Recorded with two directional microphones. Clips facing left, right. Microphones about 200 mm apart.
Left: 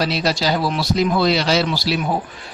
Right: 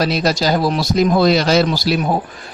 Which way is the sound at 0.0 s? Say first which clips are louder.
Right 3 dB; 45° right (ahead or behind).